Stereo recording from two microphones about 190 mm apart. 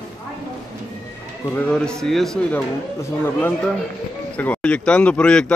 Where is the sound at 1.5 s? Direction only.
5° left (ahead or behind).